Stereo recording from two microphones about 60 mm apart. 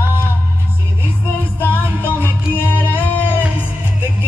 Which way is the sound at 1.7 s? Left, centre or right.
Right.